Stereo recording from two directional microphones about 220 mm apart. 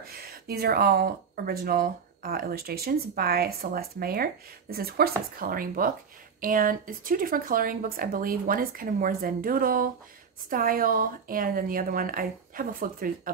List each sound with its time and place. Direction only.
0.0 s speech: 45° right (ahead or behind)